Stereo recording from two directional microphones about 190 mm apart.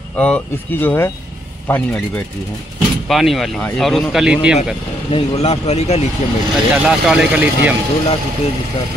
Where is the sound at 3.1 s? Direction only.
Centre (ahead or behind).